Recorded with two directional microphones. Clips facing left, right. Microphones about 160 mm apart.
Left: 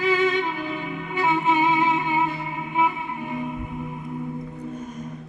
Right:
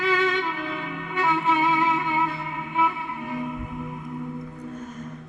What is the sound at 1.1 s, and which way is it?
Music, 15° left (ahead or behind).